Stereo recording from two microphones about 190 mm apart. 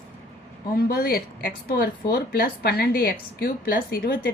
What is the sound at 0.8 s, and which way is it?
A woman's voice, 50° left (ahead or behind).